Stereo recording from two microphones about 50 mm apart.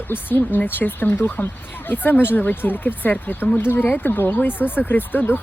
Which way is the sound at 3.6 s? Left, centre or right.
Left.